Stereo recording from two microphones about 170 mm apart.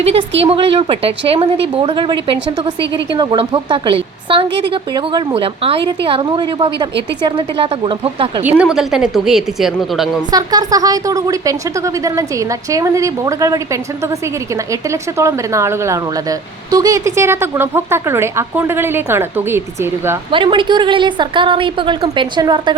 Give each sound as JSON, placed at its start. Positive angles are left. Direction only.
{"t": 0.0, "sound": "a woman's voice", "side_deg": -35}
{"t": 8.4, "sound": "a woman's voice", "side_deg": -5}
{"t": 10.3, "sound": "a woman's voice", "side_deg": -20}
{"t": 20.3, "sound": "a woman's voice", "side_deg": -30}